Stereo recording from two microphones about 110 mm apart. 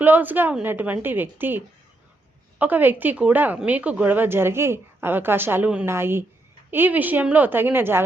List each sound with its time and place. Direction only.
0.0 s a woman's voice: 15° right (ahead or behind)